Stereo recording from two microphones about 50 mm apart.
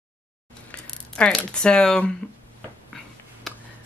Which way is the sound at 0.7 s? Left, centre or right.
Centre.